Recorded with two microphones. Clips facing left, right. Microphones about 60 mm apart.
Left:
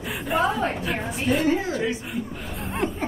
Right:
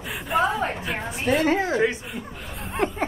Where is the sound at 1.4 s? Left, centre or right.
Right.